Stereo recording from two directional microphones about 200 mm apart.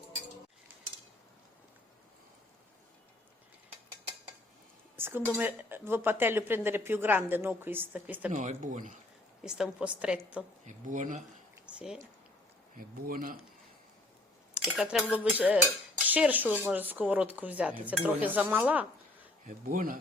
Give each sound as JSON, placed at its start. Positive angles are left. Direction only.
{"t": 4.9, "sound": "a sound", "side_deg": -10}
{"t": 5.4, "sound": "speech", "side_deg": -10}
{"t": 8.3, "sound": "speech", "side_deg": -35}
{"t": 9.4, "sound": "a woman's voice", "side_deg": -5}
{"t": 10.7, "sound": "speech", "side_deg": -40}
{"t": 11.6, "sound": "a sound", "side_deg": -5}
{"t": 12.7, "sound": "speech", "side_deg": -45}
{"t": 14.5, "sound": "speech", "side_deg": -5}
{"t": 19.5, "sound": "speech", "side_deg": -45}